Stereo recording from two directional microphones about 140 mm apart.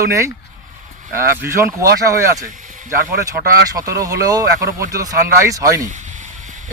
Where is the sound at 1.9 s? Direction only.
25° right (ahead or behind).